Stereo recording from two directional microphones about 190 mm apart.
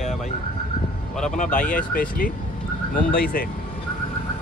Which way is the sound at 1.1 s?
5° left (ahead or behind).